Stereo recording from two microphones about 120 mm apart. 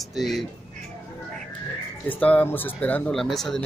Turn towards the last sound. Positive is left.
turn(degrees=5)  # may be behind; listen again after turning